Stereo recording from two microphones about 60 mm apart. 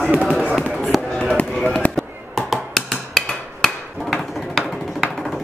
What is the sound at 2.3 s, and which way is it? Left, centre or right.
Finger snapping, centre.